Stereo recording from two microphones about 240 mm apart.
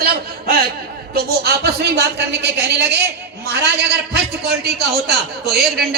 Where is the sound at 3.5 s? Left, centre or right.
Right.